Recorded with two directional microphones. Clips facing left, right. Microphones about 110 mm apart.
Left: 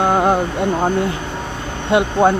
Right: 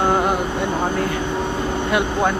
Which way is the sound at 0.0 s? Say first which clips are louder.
Left 3 dB; 25° left (ahead or behind).